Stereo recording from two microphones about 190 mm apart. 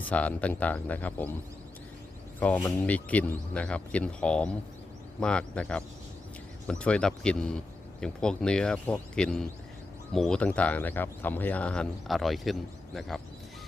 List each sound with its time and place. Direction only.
0.0 s speech: 10° left (ahead or behind)
2.4 s speech: 5° left (ahead or behind)